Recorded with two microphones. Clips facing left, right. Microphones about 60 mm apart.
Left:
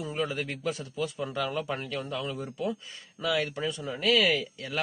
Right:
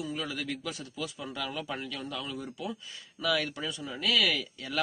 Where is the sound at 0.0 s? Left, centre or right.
Left.